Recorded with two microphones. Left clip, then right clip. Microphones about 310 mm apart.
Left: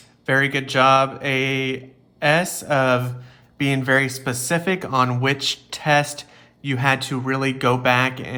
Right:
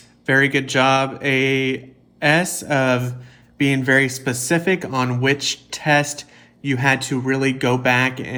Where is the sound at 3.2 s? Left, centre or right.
Left.